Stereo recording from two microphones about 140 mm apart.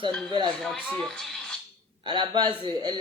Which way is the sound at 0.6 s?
Centre (ahead or behind).